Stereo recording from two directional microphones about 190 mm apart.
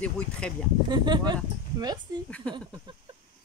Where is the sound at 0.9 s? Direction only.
25° right (ahead or behind).